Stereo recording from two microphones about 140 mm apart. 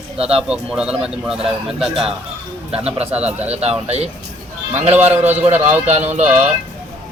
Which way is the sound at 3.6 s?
50° right (ahead or behind).